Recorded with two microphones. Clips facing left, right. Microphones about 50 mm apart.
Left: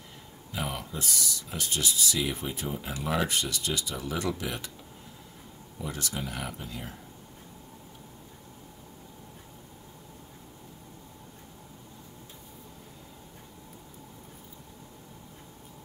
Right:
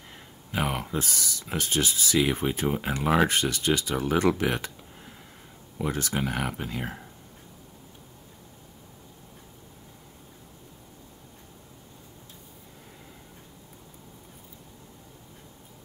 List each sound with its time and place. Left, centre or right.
0.5 s speech: right
5.9 s speech: right
6.2 s speech: right